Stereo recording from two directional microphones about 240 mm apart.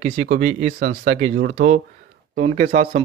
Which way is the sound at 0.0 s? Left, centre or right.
Right.